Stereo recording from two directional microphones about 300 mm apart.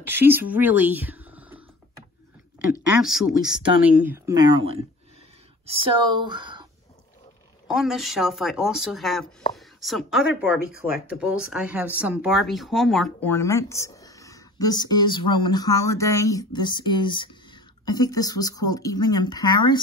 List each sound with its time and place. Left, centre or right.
0.0 s speech: centre
3.0 s speech: centre
4.6 s speech: right
5.7 s speech: centre
7.6 s speech: centre